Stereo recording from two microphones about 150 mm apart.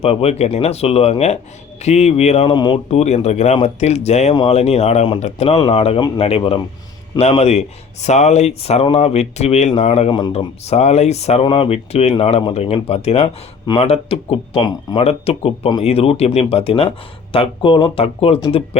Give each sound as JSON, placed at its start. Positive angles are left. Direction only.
{"t": 0.0, "sound": "speech", "side_deg": 40}
{"t": 2.5, "sound": "speech", "side_deg": 30}
{"t": 2.9, "sound": "speech", "side_deg": 45}
{"t": 10.1, "sound": "speech", "side_deg": 30}
{"t": 10.3, "sound": "speech", "side_deg": 45}